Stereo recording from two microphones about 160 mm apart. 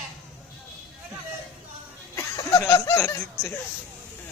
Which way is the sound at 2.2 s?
20° left (ahead or behind).